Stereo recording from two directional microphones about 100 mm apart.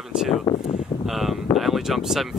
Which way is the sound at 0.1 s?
5° right (ahead or behind).